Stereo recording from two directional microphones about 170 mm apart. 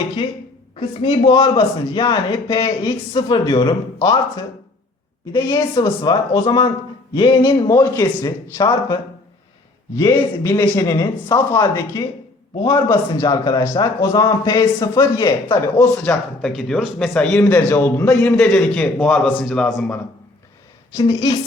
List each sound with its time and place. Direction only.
0.8 s a man's voice: 25° left (ahead or behind); by 19.6 s centre (ahead or behind)
21.1 s a man's voice: 20° left (ahead or behind)